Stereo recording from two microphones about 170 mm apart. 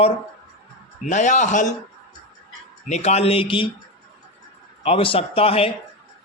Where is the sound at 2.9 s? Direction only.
40° left (ahead or behind).